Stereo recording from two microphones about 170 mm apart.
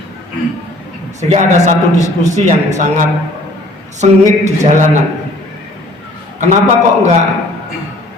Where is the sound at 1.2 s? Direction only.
40° right (ahead or behind).